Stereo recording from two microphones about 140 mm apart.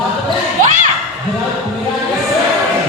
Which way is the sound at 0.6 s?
65° right (ahead or behind).